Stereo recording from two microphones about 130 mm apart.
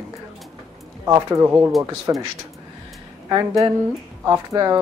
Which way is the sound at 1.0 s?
25° right (ahead or behind).